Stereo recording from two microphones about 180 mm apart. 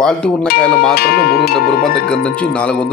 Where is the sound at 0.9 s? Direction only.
60° left (ahead or behind).